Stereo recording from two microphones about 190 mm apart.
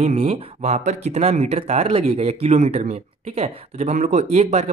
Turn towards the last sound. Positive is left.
turn(degrees=-35)  # may be behind; listen again after turning